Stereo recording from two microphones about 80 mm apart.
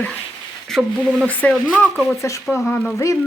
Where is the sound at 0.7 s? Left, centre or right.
Centre.